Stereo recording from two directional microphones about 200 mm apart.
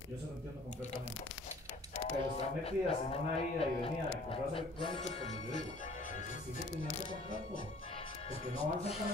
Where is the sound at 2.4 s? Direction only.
30° left (ahead or behind).